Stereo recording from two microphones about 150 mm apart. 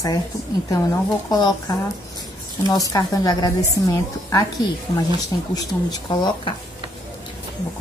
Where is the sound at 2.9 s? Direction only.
25° left (ahead or behind).